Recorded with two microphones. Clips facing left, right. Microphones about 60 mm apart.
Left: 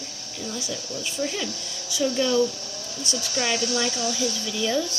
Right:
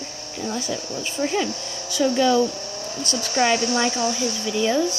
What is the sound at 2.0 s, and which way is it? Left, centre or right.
Speech, right.